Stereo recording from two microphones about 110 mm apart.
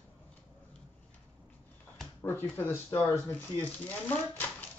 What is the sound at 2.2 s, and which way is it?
Speech, 20° left (ahead or behind).